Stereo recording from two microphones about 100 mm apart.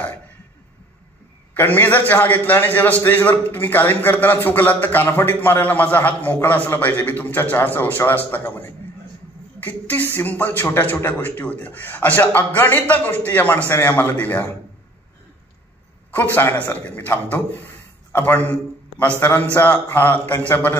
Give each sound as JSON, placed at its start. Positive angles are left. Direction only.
{"t": 1.5, "sound": "a man's voice", "side_deg": 20}
{"t": 16.3, "sound": "a man's voice", "side_deg": 20}